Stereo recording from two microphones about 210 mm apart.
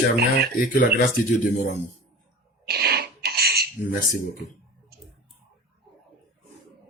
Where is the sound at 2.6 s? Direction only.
50° right (ahead or behind).